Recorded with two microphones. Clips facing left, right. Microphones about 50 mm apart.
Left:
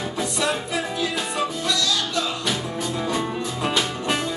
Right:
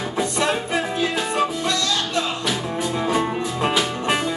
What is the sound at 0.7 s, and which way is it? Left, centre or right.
Music, right.